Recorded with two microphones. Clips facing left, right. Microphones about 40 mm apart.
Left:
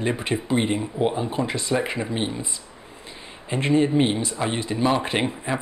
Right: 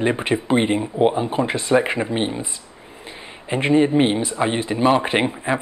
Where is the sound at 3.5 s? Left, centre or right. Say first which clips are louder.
Right 4 dB; right.